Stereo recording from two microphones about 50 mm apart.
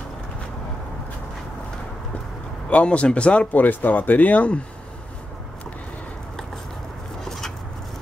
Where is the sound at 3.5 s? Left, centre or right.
Left.